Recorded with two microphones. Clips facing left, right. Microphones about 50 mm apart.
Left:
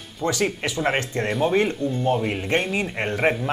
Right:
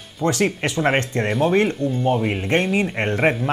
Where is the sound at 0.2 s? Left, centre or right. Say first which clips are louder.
Right 3 dB; right.